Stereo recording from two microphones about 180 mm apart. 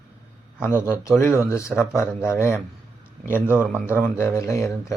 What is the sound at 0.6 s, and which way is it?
Speech, 10° left (ahead or behind).